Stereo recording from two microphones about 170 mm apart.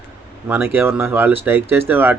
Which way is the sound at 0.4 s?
10° right (ahead or behind).